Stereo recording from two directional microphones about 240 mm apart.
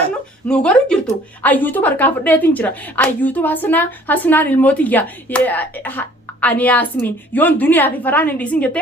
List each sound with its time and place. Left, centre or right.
0.4 s speech: centre